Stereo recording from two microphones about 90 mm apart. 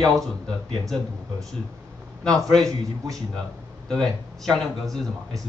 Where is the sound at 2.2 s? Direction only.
5° left (ahead or behind).